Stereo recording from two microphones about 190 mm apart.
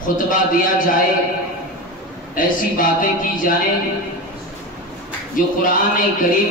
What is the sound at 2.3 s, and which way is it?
Speech, 45° left (ahead or behind).